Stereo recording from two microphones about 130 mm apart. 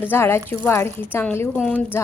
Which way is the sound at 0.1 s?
20° left (ahead or behind).